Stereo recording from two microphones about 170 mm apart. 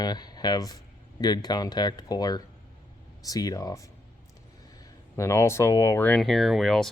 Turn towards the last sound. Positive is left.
turn(degrees=0)  # may be behind; listen again after turning